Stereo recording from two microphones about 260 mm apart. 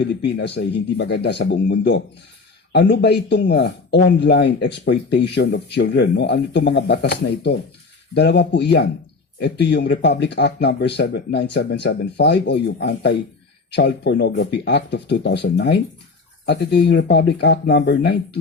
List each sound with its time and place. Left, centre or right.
0.0 s speech: left